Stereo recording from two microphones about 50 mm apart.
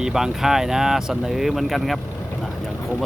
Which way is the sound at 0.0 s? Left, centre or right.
Centre.